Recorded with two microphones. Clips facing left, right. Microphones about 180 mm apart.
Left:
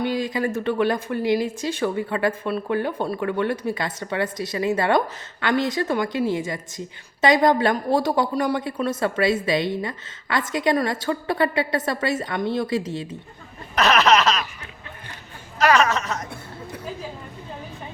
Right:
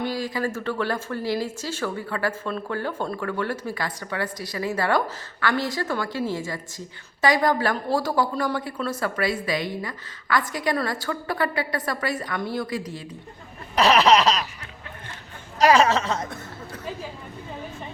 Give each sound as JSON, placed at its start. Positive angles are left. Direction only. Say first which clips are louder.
{"t": 0.0, "sound": "speech", "louder": "left 3 dB", "side_deg": 20}
{"t": 13.7, "sound": "a sound", "louder": "right 1 dB", "side_deg": -30}
{"t": 15.5, "sound": "speech", "louder": "right 1 dB", "side_deg": -30}